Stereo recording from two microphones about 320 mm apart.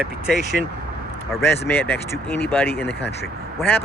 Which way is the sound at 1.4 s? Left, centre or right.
Centre.